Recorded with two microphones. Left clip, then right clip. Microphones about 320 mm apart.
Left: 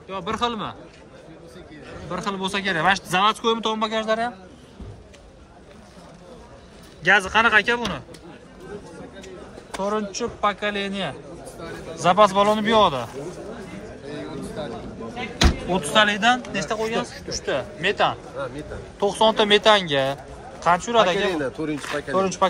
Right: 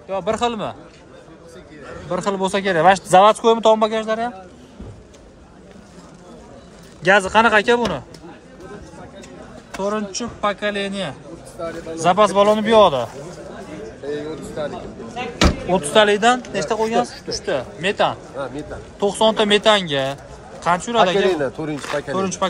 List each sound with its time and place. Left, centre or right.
0.1 s speech: centre
2.0 s speech: centre
7.0 s speech: centre
9.8 s speech: centre
15.7 s speech: centre
18.4 s speech: right
18.9 s speech: centre
21.3 s speech: right
22.1 s speech: centre